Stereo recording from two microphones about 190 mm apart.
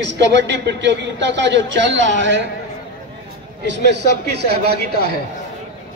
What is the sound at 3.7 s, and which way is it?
A man's voice, 60° right (ahead or behind).